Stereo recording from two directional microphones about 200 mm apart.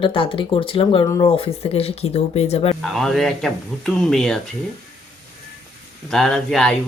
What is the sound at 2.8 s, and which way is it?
Speech, centre (ahead or behind).